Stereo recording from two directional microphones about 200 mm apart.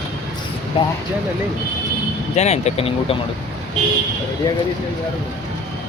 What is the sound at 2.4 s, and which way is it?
Speech, 35° left (ahead or behind).